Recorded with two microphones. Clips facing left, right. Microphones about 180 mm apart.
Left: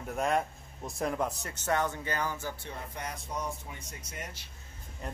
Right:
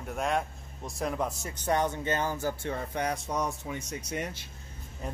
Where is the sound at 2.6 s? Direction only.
70° right (ahead or behind).